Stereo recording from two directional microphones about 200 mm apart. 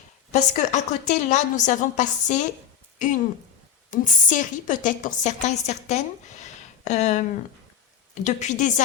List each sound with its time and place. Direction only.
0.3 s a woman's voice: 40° left (ahead or behind)
3.9 s a woman's voice: 40° left (ahead or behind)